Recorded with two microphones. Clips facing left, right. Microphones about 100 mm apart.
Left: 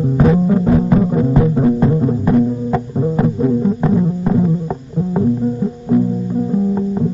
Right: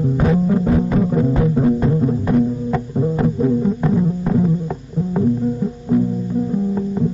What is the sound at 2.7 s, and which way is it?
Music, 20° left (ahead or behind).